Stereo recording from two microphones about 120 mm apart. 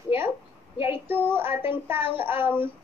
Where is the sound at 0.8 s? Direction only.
15° right (ahead or behind).